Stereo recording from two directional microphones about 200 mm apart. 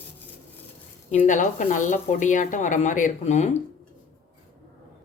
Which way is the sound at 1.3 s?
40° left (ahead or behind).